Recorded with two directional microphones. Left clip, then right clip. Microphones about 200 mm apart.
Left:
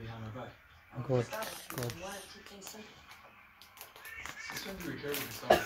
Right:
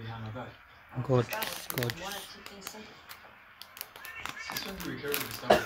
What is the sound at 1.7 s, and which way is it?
Speech, 40° right (ahead or behind).